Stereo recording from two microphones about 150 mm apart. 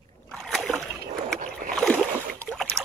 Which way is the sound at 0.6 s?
10° left (ahead or behind).